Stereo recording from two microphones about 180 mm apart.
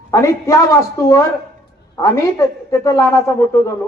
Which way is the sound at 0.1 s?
15° left (ahead or behind).